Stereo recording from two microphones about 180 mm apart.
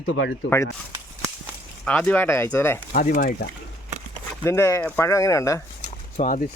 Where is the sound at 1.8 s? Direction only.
5° left (ahead or behind).